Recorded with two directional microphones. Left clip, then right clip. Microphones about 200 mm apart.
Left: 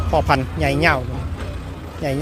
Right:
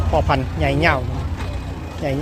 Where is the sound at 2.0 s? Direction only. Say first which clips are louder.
Even; 15° left (ahead or behind).